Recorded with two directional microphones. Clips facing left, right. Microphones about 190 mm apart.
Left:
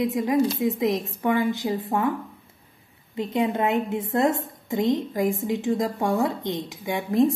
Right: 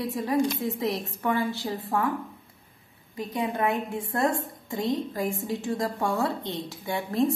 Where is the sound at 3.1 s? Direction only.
25° left (ahead or behind).